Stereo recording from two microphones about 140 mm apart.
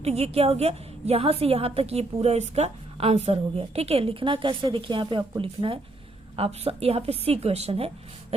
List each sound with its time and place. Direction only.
0.0 s a woman's voice: 50° right (ahead or behind)